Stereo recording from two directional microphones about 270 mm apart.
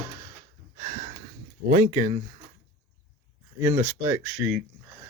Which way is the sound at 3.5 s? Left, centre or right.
Centre.